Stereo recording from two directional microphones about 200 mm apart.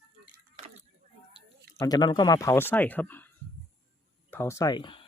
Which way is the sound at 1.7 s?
20° left (ahead or behind).